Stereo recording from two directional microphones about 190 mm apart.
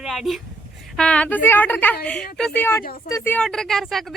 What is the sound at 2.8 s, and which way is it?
Speech, 50° left (ahead or behind).